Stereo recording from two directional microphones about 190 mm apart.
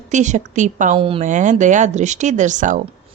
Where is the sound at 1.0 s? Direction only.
30° right (ahead or behind).